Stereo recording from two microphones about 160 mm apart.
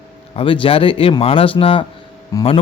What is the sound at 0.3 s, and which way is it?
Speech, 35° left (ahead or behind).